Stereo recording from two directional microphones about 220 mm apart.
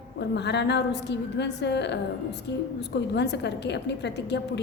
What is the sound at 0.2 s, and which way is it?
A woman's voice, 50° left (ahead or behind).